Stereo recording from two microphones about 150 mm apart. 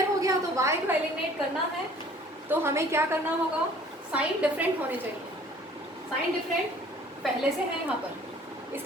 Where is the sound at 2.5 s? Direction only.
15° right (ahead or behind).